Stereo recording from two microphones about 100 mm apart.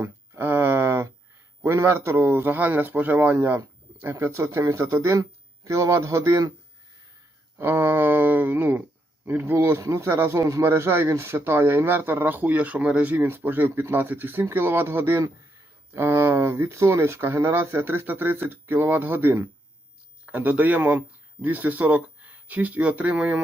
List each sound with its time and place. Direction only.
0.0 s a sound: 20° right (ahead or behind)
1.6 s a man's voice: 25° right (ahead or behind)
7.6 s a man's voice: 20° right (ahead or behind)